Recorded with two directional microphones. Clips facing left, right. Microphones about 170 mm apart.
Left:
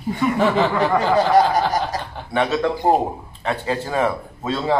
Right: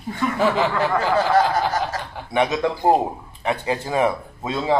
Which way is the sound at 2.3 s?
15° right (ahead or behind).